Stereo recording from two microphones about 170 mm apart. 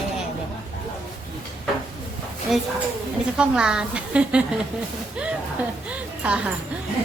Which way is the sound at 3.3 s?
5° right (ahead or behind).